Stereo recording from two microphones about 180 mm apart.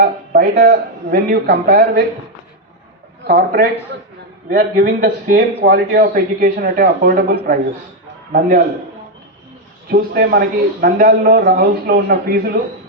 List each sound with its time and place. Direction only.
0.0 s a man's voice: 55° right (ahead or behind)
3.2 s a man's voice: 60° right (ahead or behind)
9.9 s a man's voice: 60° right (ahead or behind)